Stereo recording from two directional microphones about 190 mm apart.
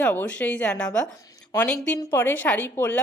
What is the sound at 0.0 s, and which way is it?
A woman's voice, 10° left (ahead or behind).